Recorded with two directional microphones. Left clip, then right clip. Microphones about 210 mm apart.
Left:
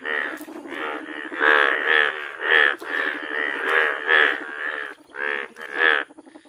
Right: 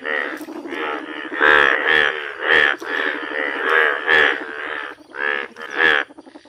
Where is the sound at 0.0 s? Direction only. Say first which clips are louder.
Right 3 dB; 55° left (ahead or behind).